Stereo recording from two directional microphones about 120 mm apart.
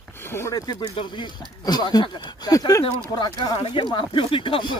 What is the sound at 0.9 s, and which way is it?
Speech, 40° left (ahead or behind).